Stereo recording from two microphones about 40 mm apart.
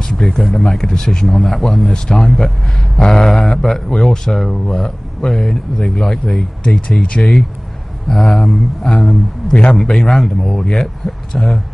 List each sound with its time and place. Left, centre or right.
0.0 s speech: centre
7.0 s speech: left
8.1 s speech: centre
9.5 s speech: left
9.8 s speech: centre